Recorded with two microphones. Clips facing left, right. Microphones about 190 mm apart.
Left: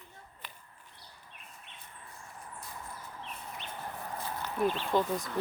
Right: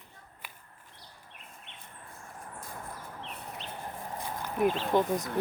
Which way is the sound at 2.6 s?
50° right (ahead or behind).